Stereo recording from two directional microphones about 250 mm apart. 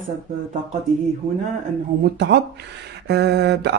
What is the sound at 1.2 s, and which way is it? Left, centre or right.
Speech, centre.